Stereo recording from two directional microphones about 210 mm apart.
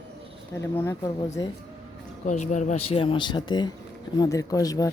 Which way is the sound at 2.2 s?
35° left (ahead or behind).